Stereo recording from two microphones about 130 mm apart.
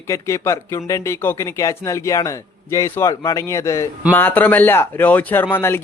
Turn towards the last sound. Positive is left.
turn(degrees=20)  # may be behind; listen again after turning